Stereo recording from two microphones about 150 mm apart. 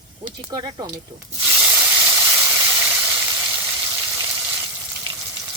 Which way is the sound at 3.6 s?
15° right (ahead or behind).